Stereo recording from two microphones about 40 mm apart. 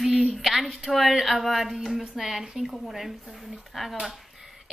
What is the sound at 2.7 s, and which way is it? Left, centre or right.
Speech, centre.